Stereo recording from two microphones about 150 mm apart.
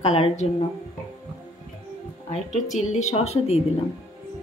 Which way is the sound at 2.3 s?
50° left (ahead or behind).